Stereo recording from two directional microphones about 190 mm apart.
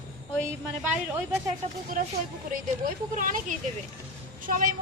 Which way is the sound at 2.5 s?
45° right (ahead or behind).